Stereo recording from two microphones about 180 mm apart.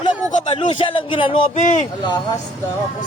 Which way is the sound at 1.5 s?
45° left (ahead or behind).